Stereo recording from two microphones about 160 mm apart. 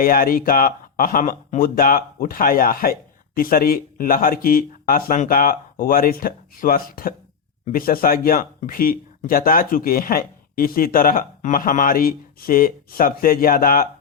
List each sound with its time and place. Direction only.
0.0 s speech: 65° left (ahead or behind)